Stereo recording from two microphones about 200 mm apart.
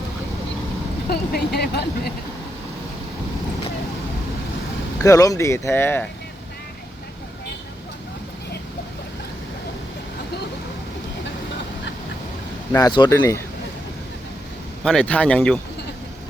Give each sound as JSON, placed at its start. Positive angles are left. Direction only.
{"t": 1.1, "sound": "speech", "side_deg": 55}
{"t": 5.0, "sound": "speech", "side_deg": 15}
{"t": 12.7, "sound": "speech", "side_deg": 20}
{"t": 14.8, "sound": "speech", "side_deg": 5}